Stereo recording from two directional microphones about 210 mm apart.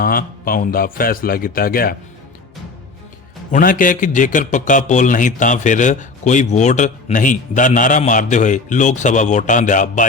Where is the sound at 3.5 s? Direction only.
40° left (ahead or behind).